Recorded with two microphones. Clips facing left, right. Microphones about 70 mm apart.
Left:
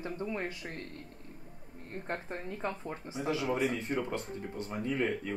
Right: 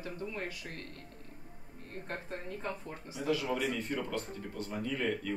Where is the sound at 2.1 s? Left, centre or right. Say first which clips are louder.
Left 3 dB; left.